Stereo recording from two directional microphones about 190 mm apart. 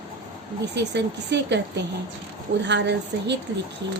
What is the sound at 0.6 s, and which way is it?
A woman's voice, 65° right (ahead or behind).